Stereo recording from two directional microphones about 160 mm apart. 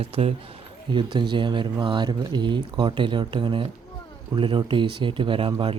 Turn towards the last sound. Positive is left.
turn(degrees=-35)  # may be behind; listen again after turning